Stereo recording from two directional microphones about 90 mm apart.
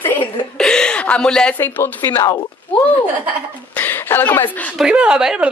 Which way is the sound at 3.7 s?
20° left (ahead or behind).